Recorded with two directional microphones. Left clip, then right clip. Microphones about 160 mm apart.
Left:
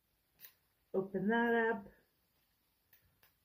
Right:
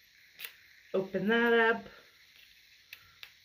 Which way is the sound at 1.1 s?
5° right (ahead or behind).